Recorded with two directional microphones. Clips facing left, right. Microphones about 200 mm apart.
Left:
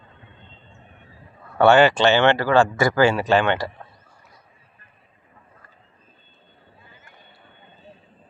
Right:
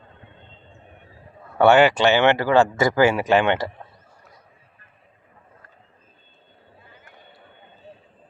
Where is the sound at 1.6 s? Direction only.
15° right (ahead or behind).